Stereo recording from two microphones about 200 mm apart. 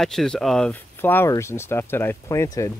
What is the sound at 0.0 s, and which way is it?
Speech, centre (ahead or behind).